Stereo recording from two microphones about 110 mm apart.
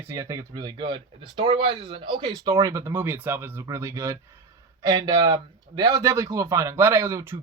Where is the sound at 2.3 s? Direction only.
35° right (ahead or behind).